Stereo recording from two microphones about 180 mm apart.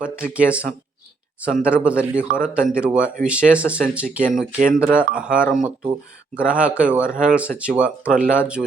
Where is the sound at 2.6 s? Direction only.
5° right (ahead or behind).